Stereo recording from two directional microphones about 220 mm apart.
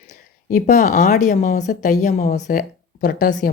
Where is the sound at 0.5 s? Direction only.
35° left (ahead or behind).